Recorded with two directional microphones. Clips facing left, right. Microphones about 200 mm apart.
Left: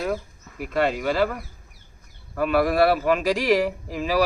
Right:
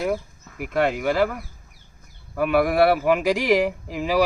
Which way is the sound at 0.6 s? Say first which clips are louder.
Right 1 dB; 15° right (ahead or behind).